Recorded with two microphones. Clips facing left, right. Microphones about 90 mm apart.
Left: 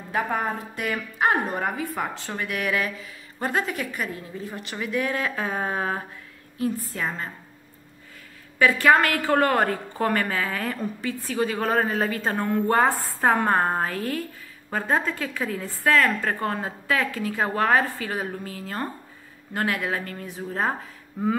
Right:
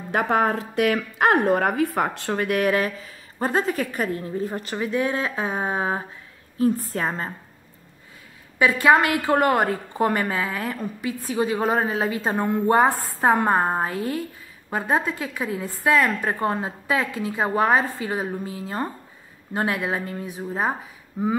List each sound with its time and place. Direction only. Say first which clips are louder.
0.1 s a woman's voice: right 5 dB; 75° right (ahead or behind); by 4.7 s 40° right (ahead or behind)
4.7 s speech: right 2 dB; 25° right (ahead or behind)
6.6 s a woman's voice: right 5 dB; 40° right (ahead or behind)
8.5 s a woman's voice: right 1 dB; 20° right (ahead or behind)